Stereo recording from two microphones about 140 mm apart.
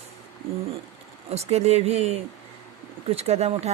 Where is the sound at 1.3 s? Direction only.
50° right (ahead or behind).